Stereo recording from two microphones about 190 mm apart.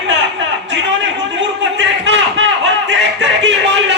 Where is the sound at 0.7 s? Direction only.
75° right (ahead or behind).